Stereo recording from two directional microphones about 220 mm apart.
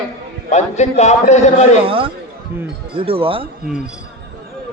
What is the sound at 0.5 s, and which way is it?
A man's voice, 30° left (ahead or behind).